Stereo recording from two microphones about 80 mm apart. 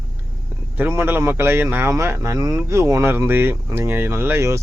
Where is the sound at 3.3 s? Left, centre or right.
Right.